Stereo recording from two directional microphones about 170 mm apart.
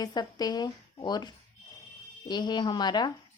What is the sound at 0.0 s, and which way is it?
A woman's voice, 25° left (ahead or behind).